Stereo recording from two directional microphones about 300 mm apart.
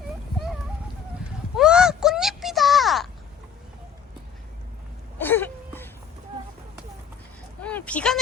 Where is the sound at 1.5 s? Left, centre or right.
Centre.